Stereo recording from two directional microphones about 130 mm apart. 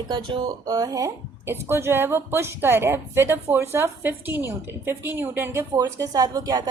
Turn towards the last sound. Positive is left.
turn(degrees=-30)  # may be behind; listen again after turning